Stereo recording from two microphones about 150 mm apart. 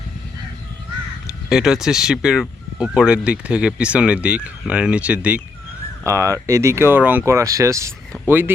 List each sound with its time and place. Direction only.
1.5 s speech: 5° right (ahead or behind)
6.1 s speech: 20° right (ahead or behind)